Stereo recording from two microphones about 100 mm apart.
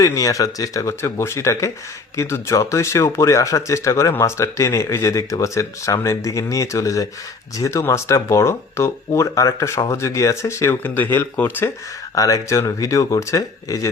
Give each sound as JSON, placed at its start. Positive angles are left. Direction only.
{"t": 0.0, "sound": "speech", "side_deg": 35}
{"t": 12.1, "sound": "speech", "side_deg": 35}